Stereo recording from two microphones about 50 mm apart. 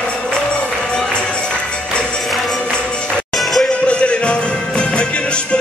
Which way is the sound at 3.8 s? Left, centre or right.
Left.